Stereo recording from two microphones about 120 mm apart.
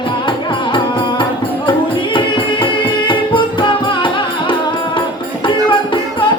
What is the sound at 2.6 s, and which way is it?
Music, 40° left (ahead or behind).